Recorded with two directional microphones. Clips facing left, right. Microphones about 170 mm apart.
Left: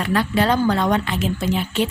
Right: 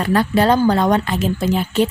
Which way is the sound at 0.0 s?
40° right (ahead or behind).